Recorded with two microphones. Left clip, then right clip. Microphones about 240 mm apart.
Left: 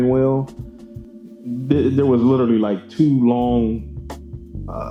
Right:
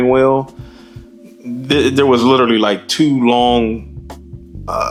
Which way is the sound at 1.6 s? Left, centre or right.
Centre.